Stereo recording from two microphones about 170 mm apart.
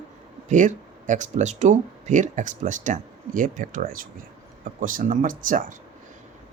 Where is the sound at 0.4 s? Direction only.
45° right (ahead or behind).